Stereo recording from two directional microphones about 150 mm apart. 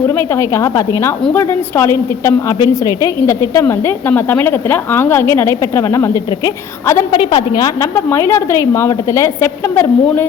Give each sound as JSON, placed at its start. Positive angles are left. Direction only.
{"t": 0.1, "sound": "a woman's voice", "side_deg": 15}
{"t": 7.3, "sound": "a woman's voice", "side_deg": 30}